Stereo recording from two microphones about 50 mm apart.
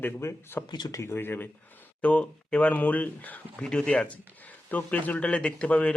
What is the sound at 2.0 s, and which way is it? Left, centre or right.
Speech, left.